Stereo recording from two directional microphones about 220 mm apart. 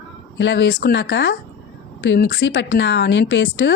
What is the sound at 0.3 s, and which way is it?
Speech, 55° left (ahead or behind).